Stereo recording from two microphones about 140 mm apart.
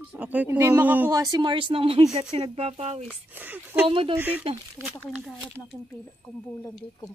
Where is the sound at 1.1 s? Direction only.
25° right (ahead or behind); by 3.1 s 50° right (ahead or behind).